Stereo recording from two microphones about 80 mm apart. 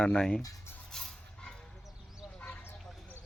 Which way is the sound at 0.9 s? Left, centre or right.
Centre.